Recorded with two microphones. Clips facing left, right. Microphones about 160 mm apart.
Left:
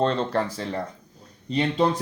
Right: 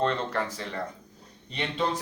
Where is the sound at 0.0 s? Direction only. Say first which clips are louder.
Left 4 dB; 30° left (ahead or behind).